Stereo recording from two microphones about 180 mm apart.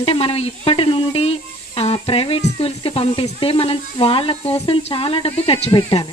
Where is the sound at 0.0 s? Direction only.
30° left (ahead or behind).